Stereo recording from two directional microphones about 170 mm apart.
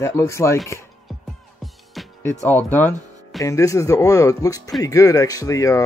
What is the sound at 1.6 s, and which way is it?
Music, centre (ahead or behind).